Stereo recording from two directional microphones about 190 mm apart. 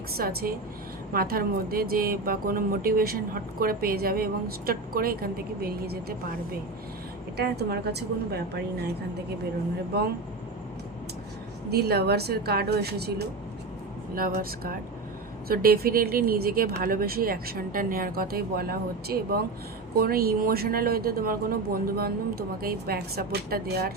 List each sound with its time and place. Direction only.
0.2 s speech: 50° right (ahead or behind)
7.3 s speech: 60° right (ahead or behind)
11.7 s speech: 60° right (ahead or behind)